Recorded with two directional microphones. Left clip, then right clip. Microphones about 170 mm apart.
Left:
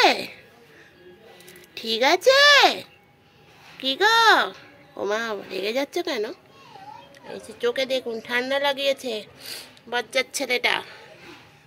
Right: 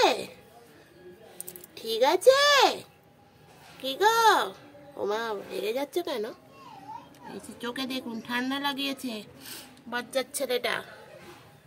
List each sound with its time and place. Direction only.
0.0 s a sound: 10° left (ahead or behind)
1.8 s speech: 10° left (ahead or behind)
7.2 s a woman's voice: 25° left (ahead or behind)